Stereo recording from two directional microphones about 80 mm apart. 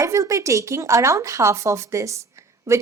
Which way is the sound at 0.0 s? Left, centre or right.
Right.